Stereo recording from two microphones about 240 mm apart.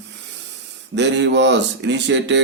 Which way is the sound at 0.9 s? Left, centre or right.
Right.